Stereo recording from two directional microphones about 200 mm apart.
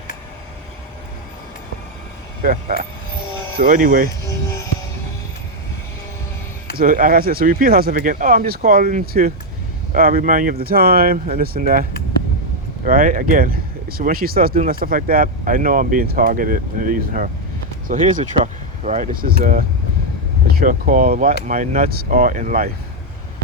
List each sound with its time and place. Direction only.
2.4 s speech: 45° right (ahead or behind)
6.7 s speech: 45° right (ahead or behind)